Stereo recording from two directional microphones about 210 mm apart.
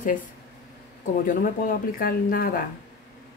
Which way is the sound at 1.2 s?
40° left (ahead or behind).